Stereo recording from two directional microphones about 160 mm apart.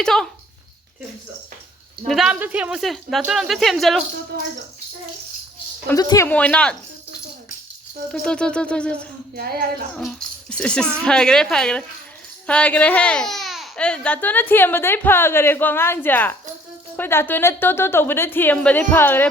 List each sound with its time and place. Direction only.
0.0 s a woman's voice: 5° left (ahead or behind)
2.0 s a woman's voice: centre (ahead or behind)
4.3 s speech: 80° right
6.0 s speech: 20° left (ahead or behind)
6.2 s speech: 10° left (ahead or behind)
8.1 s speech: 5° left (ahead or behind)
9.3 s a sound: 70° right (ahead or behind)
9.9 s a woman's voice: 5° left (ahead or behind)